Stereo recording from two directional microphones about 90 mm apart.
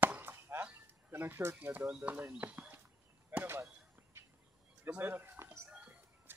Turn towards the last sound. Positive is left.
turn(degrees=-25)  # may be behind; listen again after turning